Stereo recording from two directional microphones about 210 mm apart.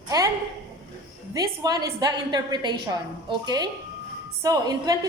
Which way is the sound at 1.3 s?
15° right (ahead or behind).